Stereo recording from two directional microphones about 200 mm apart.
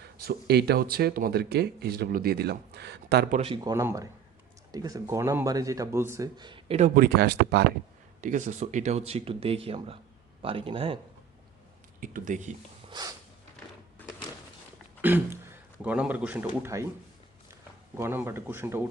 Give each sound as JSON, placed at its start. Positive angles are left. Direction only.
{"t": 0.0, "sound": "speech", "side_deg": -50}
{"t": 3.3, "sound": "speech", "side_deg": -25}
{"t": 8.2, "sound": "speech", "side_deg": -40}
{"t": 11.9, "sound": "speech", "side_deg": -40}
{"t": 12.9, "sound": "snort", "side_deg": -20}
{"t": 14.0, "sound": "a sound", "side_deg": 10}
{"t": 15.0, "sound": "a man's voice", "side_deg": -10}
{"t": 17.9, "sound": "speech", "side_deg": -10}